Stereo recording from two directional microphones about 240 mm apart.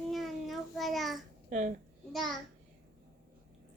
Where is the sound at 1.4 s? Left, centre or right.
Right.